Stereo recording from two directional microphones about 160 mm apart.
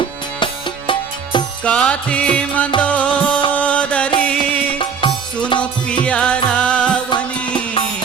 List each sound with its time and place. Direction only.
0.0 s music: 30° left (ahead or behind)
1.6 s music: 10° left (ahead or behind)
4.8 s music: 30° left (ahead or behind)
6.1 s music: 5° left (ahead or behind)